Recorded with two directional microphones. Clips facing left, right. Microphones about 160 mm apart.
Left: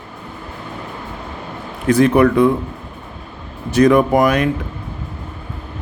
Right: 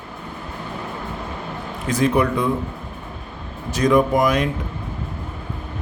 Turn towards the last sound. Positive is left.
turn(degrees=60)  # may be behind; listen again after turning